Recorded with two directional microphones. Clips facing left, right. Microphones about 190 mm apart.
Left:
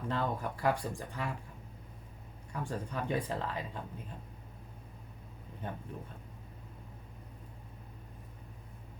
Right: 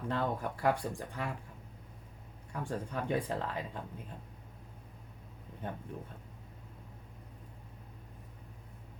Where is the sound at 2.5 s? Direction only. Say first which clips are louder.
Right 1 dB; 55° right (ahead or behind).